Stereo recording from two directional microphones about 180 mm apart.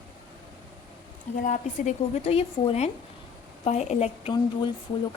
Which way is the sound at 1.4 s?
45° left (ahead or behind).